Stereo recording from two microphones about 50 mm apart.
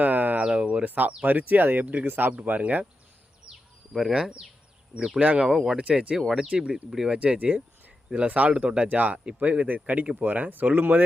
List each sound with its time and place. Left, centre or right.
0.0 s a sound: right
0.4 s a sound: right
0.9 s speech: right
2.3 s speech: right
4.1 s speech: centre
5.5 s speech: centre
5.7 s speech: right
6.1 s speech: centre
6.5 s speech: centre
7.2 s speech: right